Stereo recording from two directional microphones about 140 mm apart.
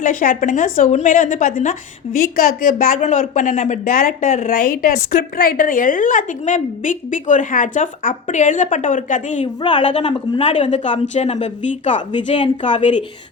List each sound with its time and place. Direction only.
0.0 s a woman's voice: 70° left (ahead or behind)
2.1 s a woman's voice: 85° left; by 9.5 s 60° left (ahead or behind)
9.6 s speech: 35° left (ahead or behind)
10.4 s a woman's voice: 55° left (ahead or behind)
12.3 s a woman's voice: 45° left (ahead or behind)